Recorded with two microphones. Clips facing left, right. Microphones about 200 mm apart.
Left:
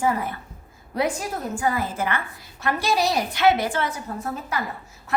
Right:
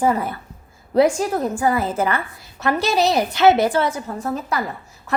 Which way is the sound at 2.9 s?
25° right (ahead or behind).